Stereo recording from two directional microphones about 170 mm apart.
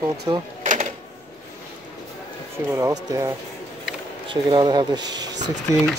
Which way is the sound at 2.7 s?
15° right (ahead or behind).